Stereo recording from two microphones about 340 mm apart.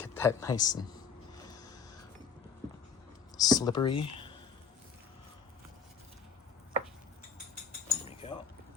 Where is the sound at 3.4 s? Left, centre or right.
Centre.